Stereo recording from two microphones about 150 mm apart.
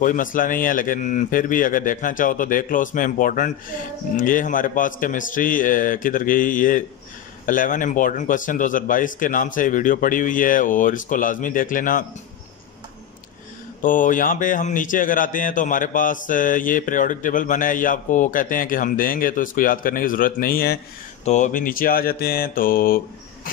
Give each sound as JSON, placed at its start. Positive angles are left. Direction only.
{"t": 0.0, "sound": "speech", "side_deg": 60}
{"t": 13.8, "sound": "speech", "side_deg": 60}
{"t": 21.2, "sound": "mantra", "side_deg": 50}